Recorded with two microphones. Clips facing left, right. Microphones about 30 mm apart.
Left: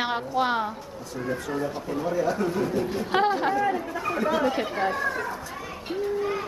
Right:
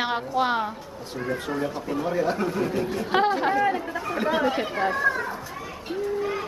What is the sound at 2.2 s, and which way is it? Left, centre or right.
Speech, right.